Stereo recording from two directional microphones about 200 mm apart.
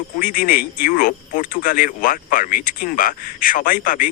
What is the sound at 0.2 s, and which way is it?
Speech, 45° left (ahead or behind).